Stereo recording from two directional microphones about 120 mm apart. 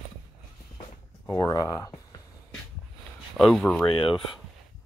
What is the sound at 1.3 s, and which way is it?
Speech, 30° left (ahead or behind).